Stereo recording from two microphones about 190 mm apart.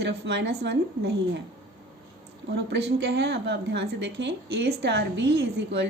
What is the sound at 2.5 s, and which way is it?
A woman's voice, 65° right (ahead or behind).